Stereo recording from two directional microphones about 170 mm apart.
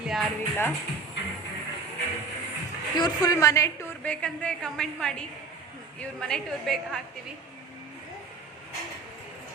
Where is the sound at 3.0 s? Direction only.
25° left (ahead or behind).